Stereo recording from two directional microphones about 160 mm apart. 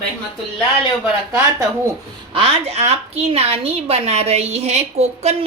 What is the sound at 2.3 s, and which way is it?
A woman's voice, 35° right (ahead or behind).